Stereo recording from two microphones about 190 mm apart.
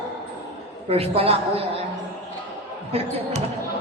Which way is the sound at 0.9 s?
30° right (ahead or behind).